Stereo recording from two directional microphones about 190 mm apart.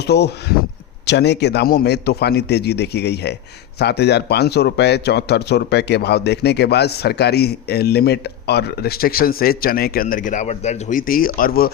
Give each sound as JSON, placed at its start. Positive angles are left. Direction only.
{"t": 0.0, "sound": "a man's voice", "side_deg": 60}